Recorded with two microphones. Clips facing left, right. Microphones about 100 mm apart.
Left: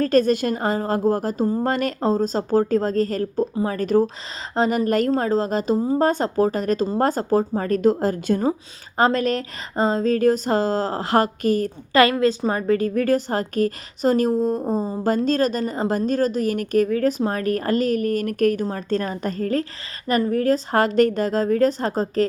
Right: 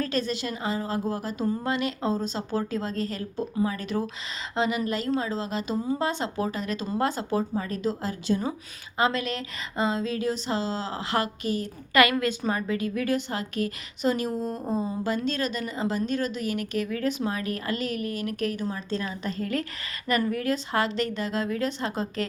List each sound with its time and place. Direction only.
0.0 s a woman's voice: 50° left (ahead or behind)
11.9 s a woman's voice: 30° left (ahead or behind)